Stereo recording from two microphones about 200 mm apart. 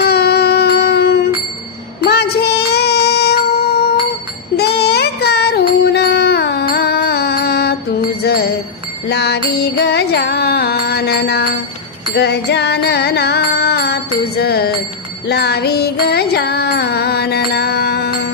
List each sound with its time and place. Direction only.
0.0 s music: 55° left (ahead or behind)